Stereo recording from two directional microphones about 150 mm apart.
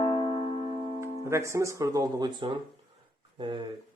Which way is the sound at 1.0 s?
20° right (ahead or behind).